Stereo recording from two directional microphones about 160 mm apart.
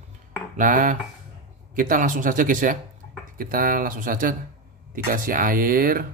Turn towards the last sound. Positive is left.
turn(degrees=-65)  # may be behind; listen again after turning